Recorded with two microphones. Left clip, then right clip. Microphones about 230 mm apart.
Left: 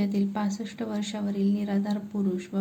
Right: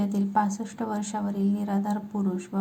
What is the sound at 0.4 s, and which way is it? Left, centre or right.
Speech, centre.